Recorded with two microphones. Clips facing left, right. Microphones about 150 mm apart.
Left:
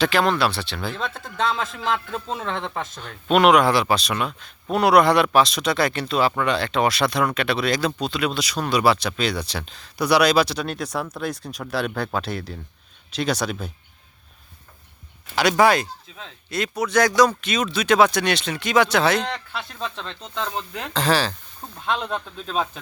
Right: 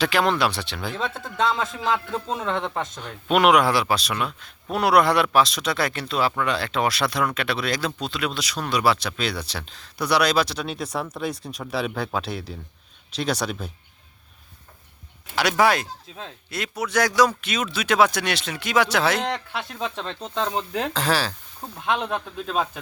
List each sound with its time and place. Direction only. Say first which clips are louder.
0.0 s speech: left 1 dB; 15° right (ahead or behind)
1.5 s speech: even; 10° right (ahead or behind)
15.4 s speech: left 3 dB; 5° right (ahead or behind)
19.3 s speech: right 2 dB; 15° right (ahead or behind)
20.9 s speech: left 6 dB; 5° right (ahead or behind)